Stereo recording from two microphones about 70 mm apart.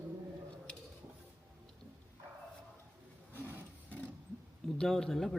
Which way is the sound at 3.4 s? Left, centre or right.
Right.